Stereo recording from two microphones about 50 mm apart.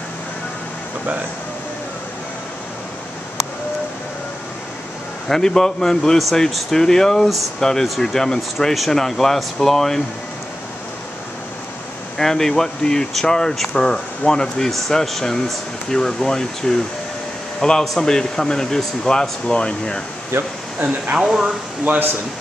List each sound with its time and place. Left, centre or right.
5.3 s speech: centre
12.2 s speech: centre
20.3 s speech: right
21.2 s speech: centre
21.9 s speech: right